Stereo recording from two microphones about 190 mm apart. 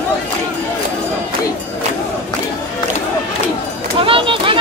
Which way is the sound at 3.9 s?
30° right (ahead or behind).